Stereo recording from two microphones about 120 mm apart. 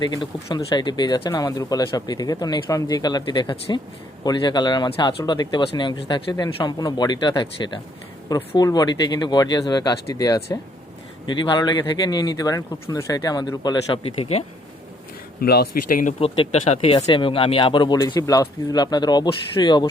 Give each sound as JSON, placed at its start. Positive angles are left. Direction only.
{"t": 0.0, "sound": "speech", "side_deg": 35}
{"t": 14.0, "sound": "speech", "side_deg": 55}
{"t": 15.9, "sound": "speech", "side_deg": 90}
{"t": 16.2, "sound": "speech", "side_deg": 55}